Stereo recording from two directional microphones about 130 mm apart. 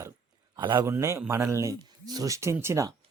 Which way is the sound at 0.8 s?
25° right (ahead or behind).